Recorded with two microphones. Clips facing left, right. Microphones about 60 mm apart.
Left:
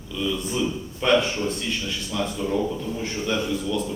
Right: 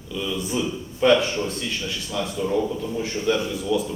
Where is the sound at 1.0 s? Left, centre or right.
Centre.